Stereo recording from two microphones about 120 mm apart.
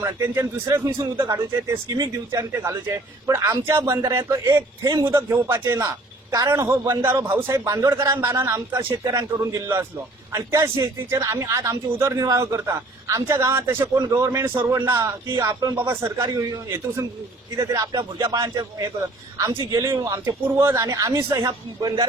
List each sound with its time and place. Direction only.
0.0 s a man's voice: 20° right (ahead or behind)
5.3 s speech: 20° right (ahead or behind)